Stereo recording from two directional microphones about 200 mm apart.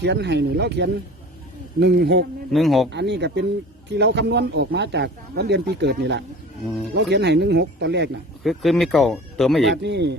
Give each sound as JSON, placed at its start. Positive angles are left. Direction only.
{"t": 0.0, "sound": "speech", "side_deg": -60}
{"t": 2.5, "sound": "speech", "side_deg": 0}
{"t": 2.9, "sound": "speech", "side_deg": -60}
{"t": 8.4, "sound": "speech", "side_deg": 0}
{"t": 9.8, "sound": "speech", "side_deg": -60}